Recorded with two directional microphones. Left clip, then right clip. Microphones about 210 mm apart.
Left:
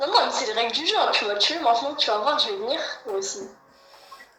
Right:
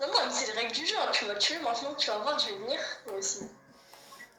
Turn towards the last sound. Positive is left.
turn(degrees=25)  # may be behind; listen again after turning